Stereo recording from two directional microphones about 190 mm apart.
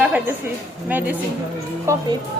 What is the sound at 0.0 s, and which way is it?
A woman's voice, 5° right (ahead or behind).